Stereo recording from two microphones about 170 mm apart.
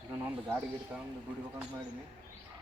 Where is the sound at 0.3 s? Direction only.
10° right (ahead or behind).